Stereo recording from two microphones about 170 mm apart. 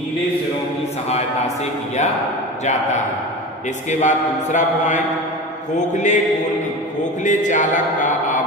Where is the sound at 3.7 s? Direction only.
45° left (ahead or behind).